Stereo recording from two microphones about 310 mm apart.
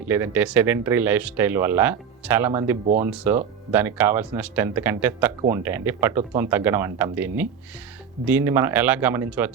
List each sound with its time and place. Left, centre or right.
0.1 s speech: centre
2.8 s speech: right
3.7 s speech: centre